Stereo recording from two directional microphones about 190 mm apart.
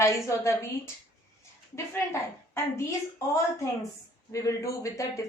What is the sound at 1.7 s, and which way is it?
Speech, 15° left (ahead or behind).